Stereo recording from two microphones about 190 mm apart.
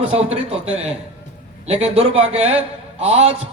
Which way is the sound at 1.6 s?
35° right (ahead or behind).